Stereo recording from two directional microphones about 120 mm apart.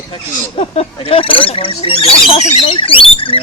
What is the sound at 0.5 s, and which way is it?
Speech, 55° left (ahead or behind).